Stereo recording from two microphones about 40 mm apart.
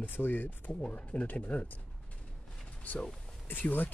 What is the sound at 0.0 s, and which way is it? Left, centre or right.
Speech, left.